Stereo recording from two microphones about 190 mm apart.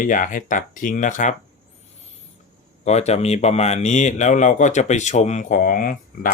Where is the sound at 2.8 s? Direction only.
35° left (ahead or behind).